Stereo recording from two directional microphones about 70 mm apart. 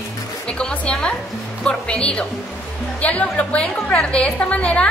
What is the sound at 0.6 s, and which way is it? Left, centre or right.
A woman's voice, centre.